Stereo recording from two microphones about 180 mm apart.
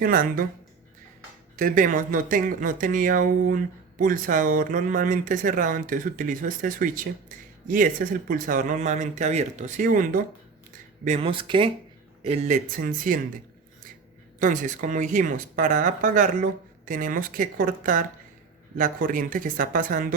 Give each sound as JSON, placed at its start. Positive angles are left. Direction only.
{"t": 0.0, "sound": "speech", "side_deg": -50}
{"t": 1.5, "sound": "speech", "side_deg": -50}
{"t": 11.0, "sound": "speech", "side_deg": -35}
{"t": 12.7, "sound": "speech", "side_deg": -50}
{"t": 14.3, "sound": "speech", "side_deg": -45}